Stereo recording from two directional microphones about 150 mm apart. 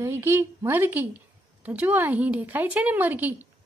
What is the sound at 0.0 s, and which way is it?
A woman's voice, 15° right (ahead or behind).